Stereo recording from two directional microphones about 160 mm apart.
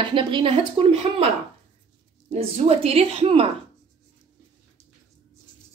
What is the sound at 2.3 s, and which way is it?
Speech, 40° right (ahead or behind).